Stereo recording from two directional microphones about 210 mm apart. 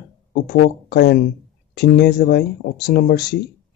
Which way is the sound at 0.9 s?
50° left (ahead or behind).